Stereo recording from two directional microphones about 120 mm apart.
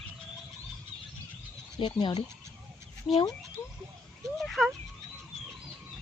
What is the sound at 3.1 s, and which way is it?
Speech, centre (ahead or behind).